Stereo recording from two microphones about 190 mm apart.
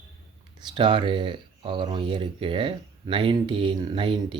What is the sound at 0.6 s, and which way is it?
Speech, 25° right (ahead or behind).